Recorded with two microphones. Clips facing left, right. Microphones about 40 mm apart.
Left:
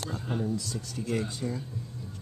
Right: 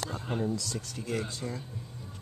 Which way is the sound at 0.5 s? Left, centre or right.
Right.